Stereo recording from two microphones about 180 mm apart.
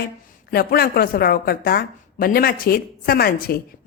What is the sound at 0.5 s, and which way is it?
Speech, 55° left (ahead or behind).